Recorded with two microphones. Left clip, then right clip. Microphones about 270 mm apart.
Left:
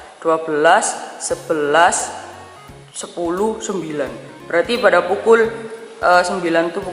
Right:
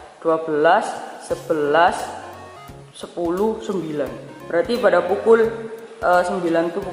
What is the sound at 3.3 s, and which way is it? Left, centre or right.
A man's voice, centre.